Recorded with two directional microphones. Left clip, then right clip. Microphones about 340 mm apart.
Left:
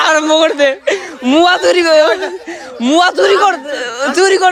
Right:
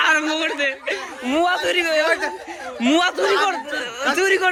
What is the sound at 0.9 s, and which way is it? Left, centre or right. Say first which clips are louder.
A man's voice: left 10 dB; left.